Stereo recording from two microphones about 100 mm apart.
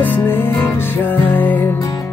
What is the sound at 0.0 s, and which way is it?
Music, 20° left (ahead or behind).